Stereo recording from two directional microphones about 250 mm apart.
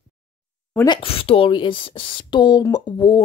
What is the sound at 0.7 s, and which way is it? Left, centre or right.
Speech, centre.